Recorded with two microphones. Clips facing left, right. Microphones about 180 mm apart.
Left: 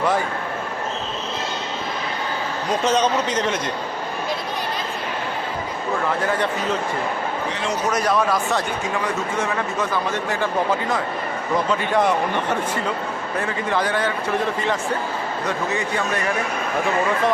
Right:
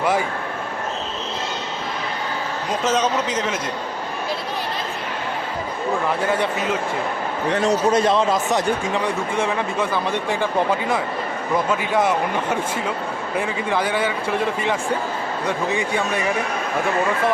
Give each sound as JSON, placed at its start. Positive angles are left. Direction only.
{"t": 2.8, "sound": "a man's voice", "side_deg": 0}
{"t": 7.5, "sound": "a man's voice", "side_deg": -40}
{"t": 7.9, "sound": "a man's voice", "side_deg": -25}
{"t": 11.7, "sound": "a man's voice", "side_deg": -5}
{"t": 15.4, "sound": "a man's voice", "side_deg": -10}